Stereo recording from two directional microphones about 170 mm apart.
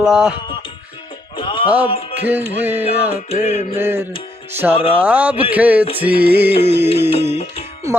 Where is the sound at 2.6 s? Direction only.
10° right (ahead or behind).